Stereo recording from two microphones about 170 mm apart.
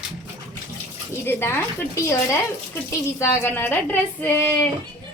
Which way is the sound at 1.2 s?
15° left (ahead or behind).